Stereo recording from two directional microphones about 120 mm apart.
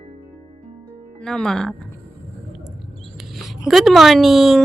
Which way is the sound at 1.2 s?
5° left (ahead or behind).